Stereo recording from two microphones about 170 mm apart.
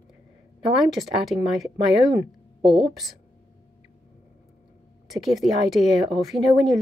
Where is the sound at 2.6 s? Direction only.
30° right (ahead or behind).